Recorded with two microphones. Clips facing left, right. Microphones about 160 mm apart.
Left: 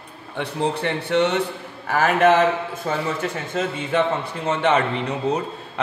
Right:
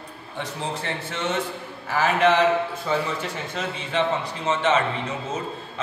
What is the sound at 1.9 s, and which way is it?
A man's voice, 50° left (ahead or behind).